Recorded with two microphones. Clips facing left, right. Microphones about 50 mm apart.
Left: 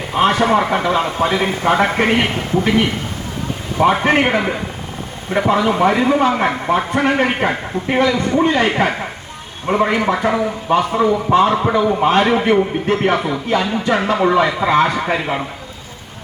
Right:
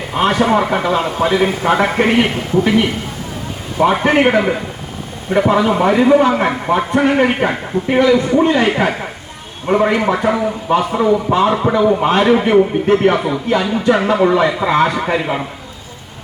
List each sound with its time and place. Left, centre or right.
0.2 s a man's voice: centre
1.2 s a man's voice: left
1.6 s a man's voice: centre
3.8 s a man's voice: centre